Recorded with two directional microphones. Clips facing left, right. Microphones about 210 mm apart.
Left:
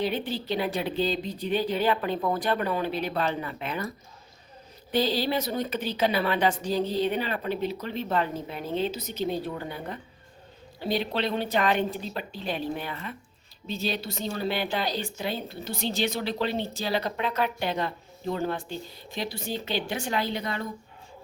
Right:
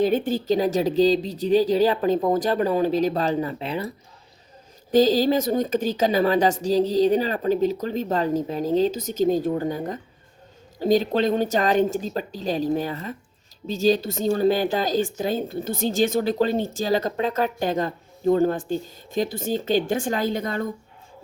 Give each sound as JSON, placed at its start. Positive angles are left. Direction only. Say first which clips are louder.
{"t": 0.0, "sound": "a woman's voice", "louder": "right 8 dB", "side_deg": -45}